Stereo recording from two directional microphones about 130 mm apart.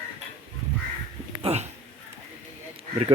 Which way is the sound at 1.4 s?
55° right (ahead or behind).